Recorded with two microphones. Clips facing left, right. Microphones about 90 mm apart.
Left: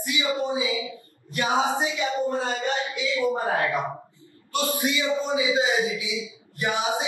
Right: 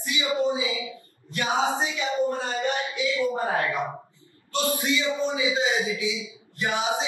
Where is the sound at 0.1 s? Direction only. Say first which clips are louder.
Left 1 dB; 20° right (ahead or behind).